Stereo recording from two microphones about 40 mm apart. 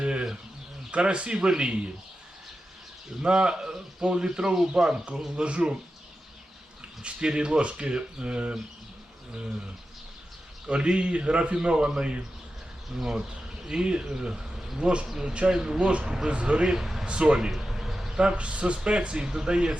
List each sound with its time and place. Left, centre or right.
0.0 s bird: right
0.9 s speech: right
3.2 s speech: right
7.0 s speech: right
10.7 s speech: right
13.0 s speech: centre
15.0 s speech: centre
15.3 s speech: right
15.9 s speech: right
16.6 s speech: centre
17.1 s speech: right
17.5 s a sound: centre
18.2 s speech: right